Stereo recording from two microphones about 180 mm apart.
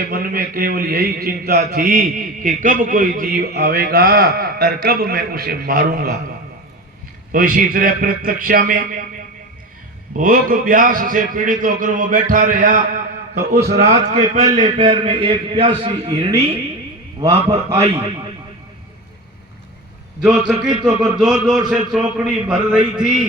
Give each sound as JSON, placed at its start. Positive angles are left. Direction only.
{"t": 0.1, "sound": "a man's voice", "side_deg": -50}
{"t": 7.3, "sound": "a man's voice", "side_deg": -50}
{"t": 10.2, "sound": "a man's voice", "side_deg": -50}
{"t": 14.1, "sound": "a man's voice", "side_deg": -35}
{"t": 20.2, "sound": "a man's voice", "side_deg": -5}